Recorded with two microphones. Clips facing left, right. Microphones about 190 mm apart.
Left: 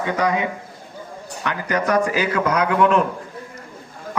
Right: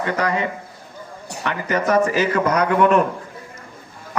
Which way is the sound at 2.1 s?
10° left (ahead or behind).